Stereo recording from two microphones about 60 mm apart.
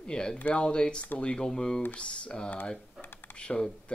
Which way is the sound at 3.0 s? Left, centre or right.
Left.